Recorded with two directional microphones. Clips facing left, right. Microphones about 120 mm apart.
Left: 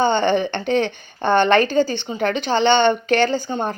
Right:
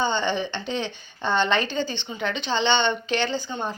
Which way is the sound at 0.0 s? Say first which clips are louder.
Left 7 dB; 55° left (ahead or behind).